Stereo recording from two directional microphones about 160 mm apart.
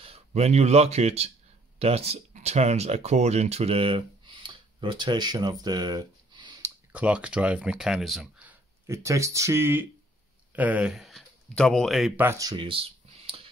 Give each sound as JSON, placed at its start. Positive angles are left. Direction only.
{"t": 0.0, "sound": "speech", "side_deg": -40}
{"t": 6.9, "sound": "speech", "side_deg": -10}
{"t": 12.2, "sound": "speech", "side_deg": -20}